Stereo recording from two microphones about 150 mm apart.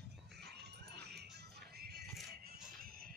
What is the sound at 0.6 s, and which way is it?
Music, 90° right.